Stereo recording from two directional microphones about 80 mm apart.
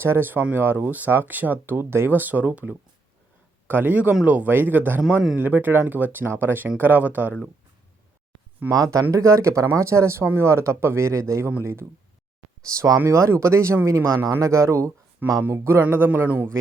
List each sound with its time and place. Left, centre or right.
0.0 s speech: right
8.7 s speech: right
12.7 s speech: right